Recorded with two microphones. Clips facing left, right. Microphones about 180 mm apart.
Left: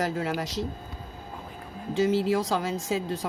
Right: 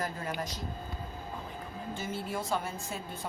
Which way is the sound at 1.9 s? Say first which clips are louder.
Left 14 dB; 90° left.